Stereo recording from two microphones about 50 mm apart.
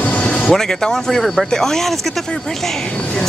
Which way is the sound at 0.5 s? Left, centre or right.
Centre.